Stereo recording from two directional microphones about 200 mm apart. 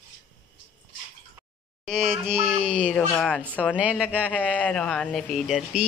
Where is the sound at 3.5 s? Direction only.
5° left (ahead or behind).